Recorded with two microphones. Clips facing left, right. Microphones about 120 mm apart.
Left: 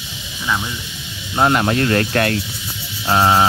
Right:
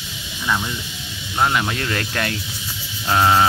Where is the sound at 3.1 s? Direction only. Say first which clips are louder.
Left 2 dB; 30° left (ahead or behind).